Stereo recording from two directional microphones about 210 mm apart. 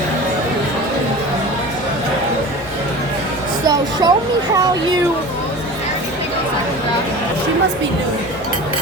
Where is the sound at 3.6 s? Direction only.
15° right (ahead or behind).